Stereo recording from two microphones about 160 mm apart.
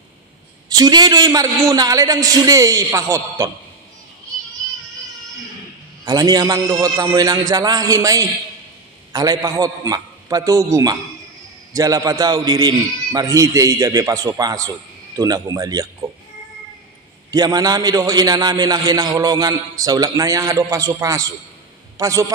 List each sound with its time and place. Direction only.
0.7 s a man's voice: 25° right (ahead or behind)
6.0 s a man's voice: 25° right (ahead or behind)
17.3 s a man's voice: 25° right (ahead or behind)